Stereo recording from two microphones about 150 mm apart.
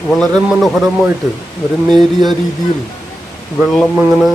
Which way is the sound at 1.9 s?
30° right (ahead or behind).